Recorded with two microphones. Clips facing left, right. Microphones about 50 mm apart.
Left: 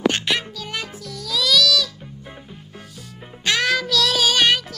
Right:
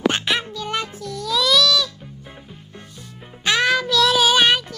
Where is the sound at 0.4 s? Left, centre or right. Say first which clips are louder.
Right 4 dB; centre.